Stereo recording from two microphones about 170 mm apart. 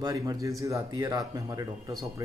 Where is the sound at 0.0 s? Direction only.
20° right (ahead or behind).